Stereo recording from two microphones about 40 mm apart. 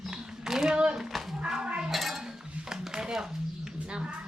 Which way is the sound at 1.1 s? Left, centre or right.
Centre.